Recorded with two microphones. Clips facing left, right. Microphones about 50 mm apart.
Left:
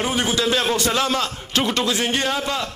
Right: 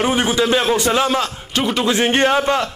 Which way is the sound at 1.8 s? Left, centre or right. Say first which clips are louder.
Right 6 dB; right.